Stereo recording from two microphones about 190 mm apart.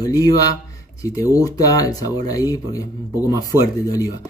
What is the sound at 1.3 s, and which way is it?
Speech, 20° left (ahead or behind).